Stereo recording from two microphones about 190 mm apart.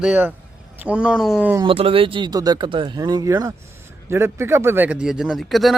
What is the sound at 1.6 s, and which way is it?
Speech, 30° right (ahead or behind).